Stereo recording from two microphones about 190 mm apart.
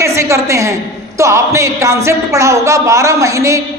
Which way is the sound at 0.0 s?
15° right (ahead or behind).